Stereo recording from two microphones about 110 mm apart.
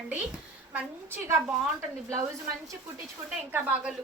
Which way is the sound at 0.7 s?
15° right (ahead or behind).